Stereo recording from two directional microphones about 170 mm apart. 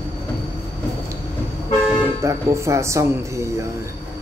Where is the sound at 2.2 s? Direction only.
15° right (ahead or behind).